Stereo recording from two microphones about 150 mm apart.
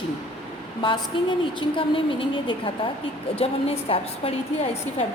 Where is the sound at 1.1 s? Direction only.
35° left (ahead or behind).